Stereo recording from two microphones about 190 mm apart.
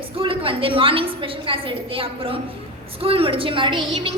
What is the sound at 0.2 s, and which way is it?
A woman's voice, 30° right (ahead or behind).